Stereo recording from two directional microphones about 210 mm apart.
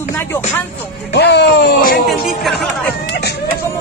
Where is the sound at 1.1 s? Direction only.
55° left (ahead or behind).